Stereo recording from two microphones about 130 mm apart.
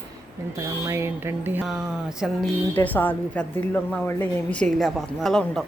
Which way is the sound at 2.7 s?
15° left (ahead or behind).